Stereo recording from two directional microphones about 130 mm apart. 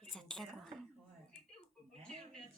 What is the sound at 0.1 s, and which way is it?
Whispering, 5° left (ahead or behind).